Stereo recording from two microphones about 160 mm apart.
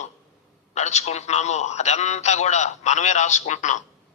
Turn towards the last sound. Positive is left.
turn(degrees=50)  # may be behind; listen again after turning